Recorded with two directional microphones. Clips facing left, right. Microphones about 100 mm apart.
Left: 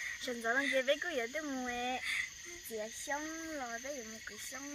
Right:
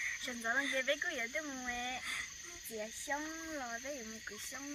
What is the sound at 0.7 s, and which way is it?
Speech, 35° left (ahead or behind).